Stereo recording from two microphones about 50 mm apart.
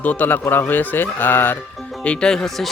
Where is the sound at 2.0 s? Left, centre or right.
Left.